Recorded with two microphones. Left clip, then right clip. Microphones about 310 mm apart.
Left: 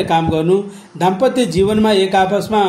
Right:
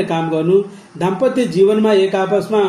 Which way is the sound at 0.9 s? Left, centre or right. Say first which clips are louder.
Left 2 dB; left.